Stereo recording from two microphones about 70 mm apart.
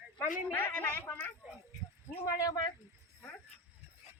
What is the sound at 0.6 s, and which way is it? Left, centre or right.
Speech, left.